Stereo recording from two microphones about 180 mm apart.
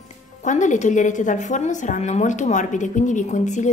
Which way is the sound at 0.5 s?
40° left (ahead or behind).